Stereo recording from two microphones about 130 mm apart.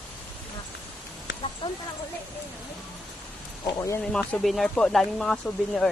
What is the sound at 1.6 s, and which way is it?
Speech, 40° left (ahead or behind).